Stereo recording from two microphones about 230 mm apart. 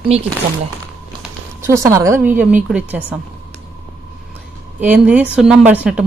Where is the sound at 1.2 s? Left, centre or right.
Centre.